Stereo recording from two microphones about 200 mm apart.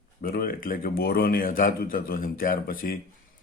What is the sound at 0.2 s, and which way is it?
A man's voice, 45° left (ahead or behind).